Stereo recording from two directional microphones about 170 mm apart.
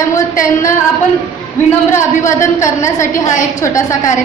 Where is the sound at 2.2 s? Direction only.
15° left (ahead or behind).